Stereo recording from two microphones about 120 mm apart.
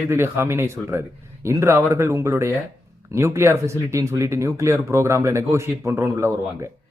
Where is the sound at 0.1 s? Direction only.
20° right (ahead or behind).